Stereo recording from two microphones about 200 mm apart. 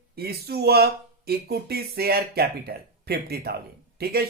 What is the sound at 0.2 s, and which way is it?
Speech, 50° right (ahead or behind).